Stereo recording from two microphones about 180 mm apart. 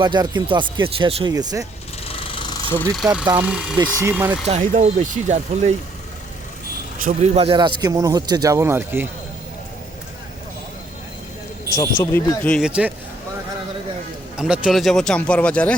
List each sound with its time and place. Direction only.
0.0 s speech: 25° right (ahead or behind)
2.0 s jackhammer: 30° left (ahead or behind)
2.9 s speech: 5° right (ahead or behind)
3.8 s speech: 15° right (ahead or behind)
4.4 s speech: 40° right (ahead or behind)
7.0 s speech: 40° right (ahead or behind); by 9.0 s 10° right (ahead or behind)
11.7 s speech: 15° left (ahead or behind)
12.6 s speech: 5° right (ahead or behind)
14.3 s speech: 5° right (ahead or behind)